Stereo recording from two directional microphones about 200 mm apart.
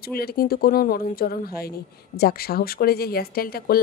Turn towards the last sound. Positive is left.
turn(degrees=50)  # may be behind; listen again after turning